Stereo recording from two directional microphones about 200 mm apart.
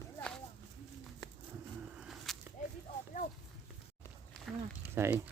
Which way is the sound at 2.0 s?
Centre (ahead or behind).